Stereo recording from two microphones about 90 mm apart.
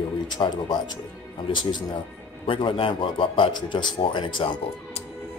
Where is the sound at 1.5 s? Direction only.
60° left (ahead or behind).